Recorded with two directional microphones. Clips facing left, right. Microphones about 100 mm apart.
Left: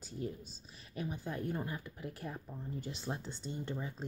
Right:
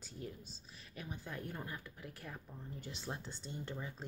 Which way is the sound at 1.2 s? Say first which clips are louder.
Left 6 dB; 15° left (ahead or behind).